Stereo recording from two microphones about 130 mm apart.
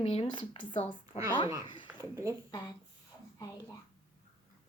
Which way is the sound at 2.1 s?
25° right (ahead or behind).